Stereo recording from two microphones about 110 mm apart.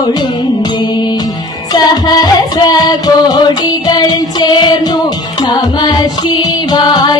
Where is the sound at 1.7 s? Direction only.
40° left (ahead or behind).